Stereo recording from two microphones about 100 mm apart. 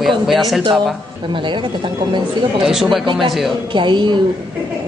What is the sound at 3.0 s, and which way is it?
Speech, 55° right (ahead or behind).